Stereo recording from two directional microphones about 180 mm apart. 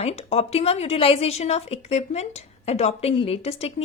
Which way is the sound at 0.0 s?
35° left (ahead or behind).